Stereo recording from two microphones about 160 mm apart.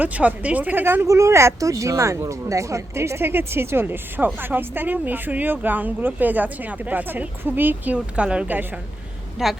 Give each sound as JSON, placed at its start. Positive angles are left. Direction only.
{"t": 0.0, "sound": "a woman's voice", "side_deg": -10}